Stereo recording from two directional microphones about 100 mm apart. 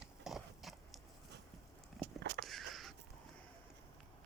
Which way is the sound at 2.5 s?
Centre (ahead or behind).